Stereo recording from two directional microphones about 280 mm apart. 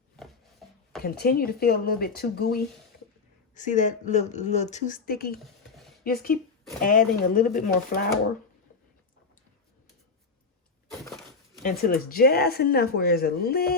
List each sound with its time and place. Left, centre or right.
1.0 s speech: left
5.4 s a sound: centre
6.0 s speech: left
11.9 s speech: left